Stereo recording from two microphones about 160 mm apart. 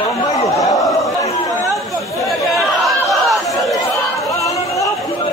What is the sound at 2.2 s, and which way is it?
Chatter, centre (ahead or behind).